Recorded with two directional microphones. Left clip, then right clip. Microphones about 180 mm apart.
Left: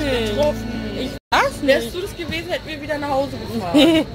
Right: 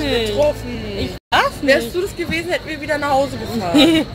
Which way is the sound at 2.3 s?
35° right (ahead or behind).